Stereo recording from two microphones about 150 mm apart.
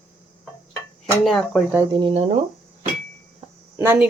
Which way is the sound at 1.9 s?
35° right (ahead or behind).